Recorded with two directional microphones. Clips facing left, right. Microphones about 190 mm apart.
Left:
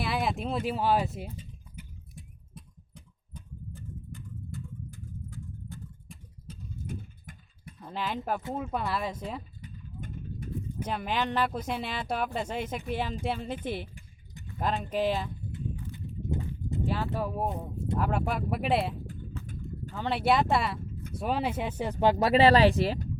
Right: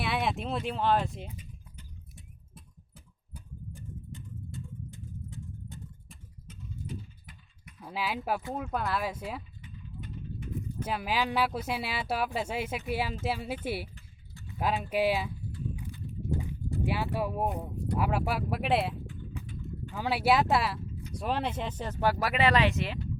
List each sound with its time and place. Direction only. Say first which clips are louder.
0.0 s speech: left 1 dB; centre (ahead or behind)
2.1 s a sound: left 4 dB; 5° right (ahead or behind); by 5.8 s 20° right (ahead or behind)
6.1 s a sound: left 4 dB; centre (ahead or behind)
6.5 s typing: left 4 dB; 35° left (ahead or behind)
6.8 s a sound: left 2 dB; 50° left (ahead or behind)
7.8 s speech: even; 5° right (ahead or behind)
9.6 s vehicle: left 2 dB; 40° left (ahead or behind)
10.8 s speech: even; 5° right (ahead or behind)
16.3 s clip-clop: even; 20° left (ahead or behind)
16.8 s speech: even; 10° right (ahead or behind)
19.0 s a sound: left 1 dB; 45° left (ahead or behind)
19.9 s speech: even; 10° right (ahead or behind); by 21.9 s 10° left (ahead or behind)
22.0 s speech: left 6 dB; 20° left (ahead or behind)